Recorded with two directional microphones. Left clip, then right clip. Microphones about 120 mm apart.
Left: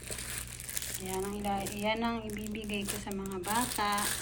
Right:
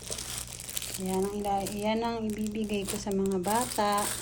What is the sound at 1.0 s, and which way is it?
Speech, 25° right (ahead or behind).